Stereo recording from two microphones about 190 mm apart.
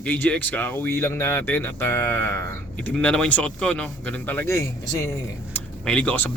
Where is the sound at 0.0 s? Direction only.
10° left (ahead or behind).